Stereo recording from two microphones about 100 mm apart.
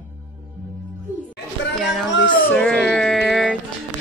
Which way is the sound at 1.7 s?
Centre (ahead or behind).